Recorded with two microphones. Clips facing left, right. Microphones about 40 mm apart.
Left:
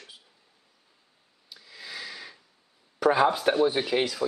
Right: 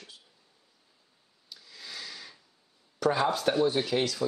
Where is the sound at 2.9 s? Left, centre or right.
Centre.